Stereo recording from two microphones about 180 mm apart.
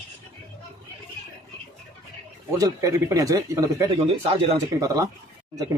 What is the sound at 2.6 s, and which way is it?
A man's voice, 20° right (ahead or behind).